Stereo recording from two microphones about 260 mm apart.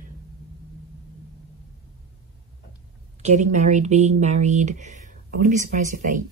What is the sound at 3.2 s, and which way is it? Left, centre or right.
Speech, right.